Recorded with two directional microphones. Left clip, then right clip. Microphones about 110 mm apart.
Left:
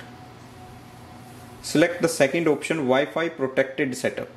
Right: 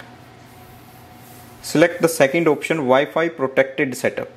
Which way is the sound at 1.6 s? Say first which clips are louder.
Right 5 dB; 40° right (ahead or behind).